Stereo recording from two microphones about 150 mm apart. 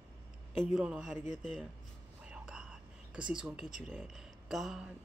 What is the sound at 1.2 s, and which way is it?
Speech, 55° left (ahead or behind).